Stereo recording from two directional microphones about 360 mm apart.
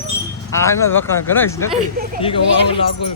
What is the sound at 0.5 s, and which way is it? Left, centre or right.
Speech, centre.